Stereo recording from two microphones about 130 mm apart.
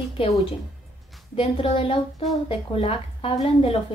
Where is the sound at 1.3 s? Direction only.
45° left (ahead or behind).